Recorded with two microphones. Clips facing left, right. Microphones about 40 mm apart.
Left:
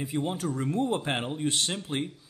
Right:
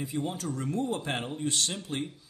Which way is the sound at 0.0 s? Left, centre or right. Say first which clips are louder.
Left 3 dB; left.